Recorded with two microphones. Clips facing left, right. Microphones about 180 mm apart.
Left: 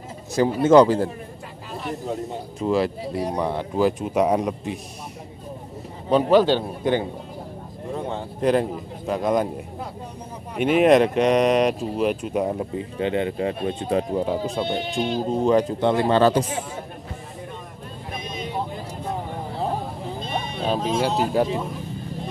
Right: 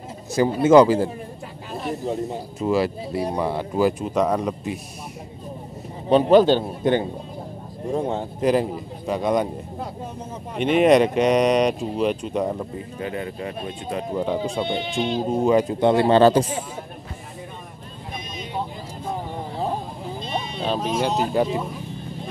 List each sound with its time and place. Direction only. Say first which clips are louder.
0.4 s speech: right 1 dB; 5° right (ahead or behind)
2.6 s speech: even; 5° right (ahead or behind)
4.1 s speech: left 1 dB; 10° left (ahead or behind)
6.0 s a man's voice: right 2 dB; 20° right (ahead or behind)
7.9 s speech: right 5 dB; 5° right (ahead or behind)
10.6 s speech: even; centre (ahead or behind)
12.7 s speech: left 5 dB; 25° left (ahead or behind)
14.1 s speech: even; 5° left (ahead or behind)
15.2 s speech: right 1 dB; 5° right (ahead or behind)
16.1 s speech: right 3 dB; 30° right (ahead or behind)
20.6 s speech: left 1 dB; 5° left (ahead or behind)